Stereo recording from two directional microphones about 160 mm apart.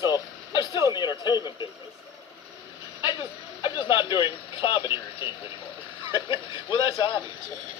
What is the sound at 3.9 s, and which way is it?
Speech, 30° left (ahead or behind).